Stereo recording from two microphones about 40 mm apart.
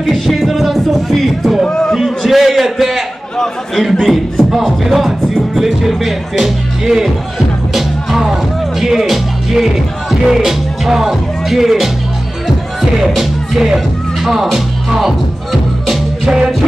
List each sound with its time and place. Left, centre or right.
0.1 s music: centre
1.7 s a sound: centre
2.0 s a man's voice: centre
4.0 s music: centre
10.2 s speech: centre
13.1 s speech: centre
14.2 s music: centre